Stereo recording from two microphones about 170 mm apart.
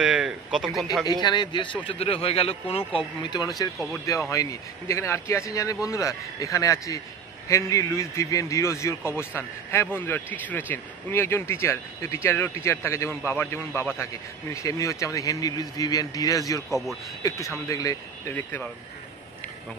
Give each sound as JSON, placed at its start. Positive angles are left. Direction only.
{"t": 0.0, "sound": "speech", "side_deg": -5}
{"t": 1.0, "sound": "a man's voice", "side_deg": 25}